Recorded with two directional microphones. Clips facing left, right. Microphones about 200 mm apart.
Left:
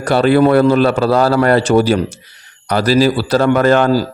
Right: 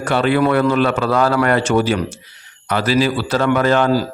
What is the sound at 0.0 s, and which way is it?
Speech, 35° left (ahead or behind).